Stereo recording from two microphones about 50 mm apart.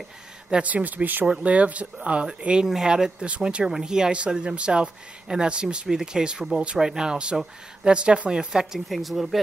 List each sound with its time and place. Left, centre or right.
0.5 s speech: right
8.8 s speech: centre